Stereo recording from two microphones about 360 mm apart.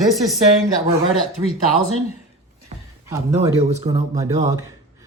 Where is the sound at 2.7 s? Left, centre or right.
Centre.